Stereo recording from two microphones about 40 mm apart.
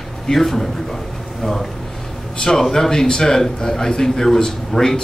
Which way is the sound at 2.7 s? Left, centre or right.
Centre.